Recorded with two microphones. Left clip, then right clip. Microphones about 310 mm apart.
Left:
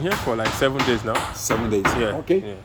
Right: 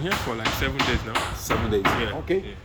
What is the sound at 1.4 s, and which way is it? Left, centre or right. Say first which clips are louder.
Speech: left 2 dB; left.